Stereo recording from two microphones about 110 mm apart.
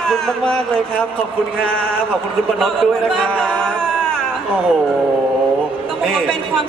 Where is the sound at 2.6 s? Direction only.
Centre (ahead or behind).